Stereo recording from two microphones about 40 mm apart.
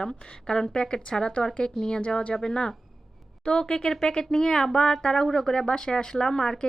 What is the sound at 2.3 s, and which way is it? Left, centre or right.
Speech, centre.